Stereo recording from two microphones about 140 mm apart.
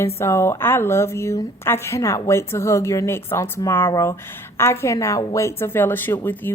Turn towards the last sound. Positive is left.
turn(degrees=15)  # may be behind; listen again after turning